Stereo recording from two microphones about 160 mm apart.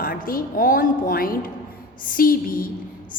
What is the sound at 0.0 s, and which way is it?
A woman's voice, 65° left (ahead or behind).